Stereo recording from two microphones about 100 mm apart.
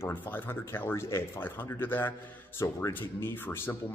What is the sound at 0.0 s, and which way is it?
Speech, 20° left (ahead or behind).